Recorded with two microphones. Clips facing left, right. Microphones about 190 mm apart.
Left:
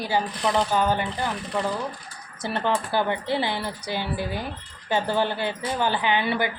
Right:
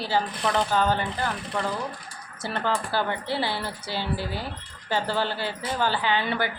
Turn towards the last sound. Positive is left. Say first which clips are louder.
# left 2 dB
turn(degrees=15)  # may be behind; listen again after turning